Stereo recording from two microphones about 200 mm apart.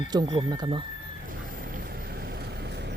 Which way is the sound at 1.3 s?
45° right (ahead or behind).